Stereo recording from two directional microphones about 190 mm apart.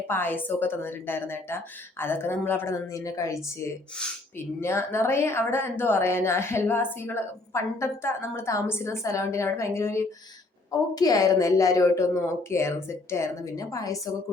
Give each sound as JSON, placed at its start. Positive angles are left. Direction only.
{"t": 0.1, "sound": "a woman's voice", "side_deg": 10}